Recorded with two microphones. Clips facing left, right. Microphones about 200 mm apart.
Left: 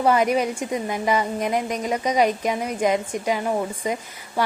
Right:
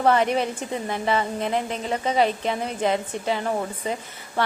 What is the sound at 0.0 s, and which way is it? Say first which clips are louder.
A woman's voice: left 1 dB; 10° left (ahead or behind).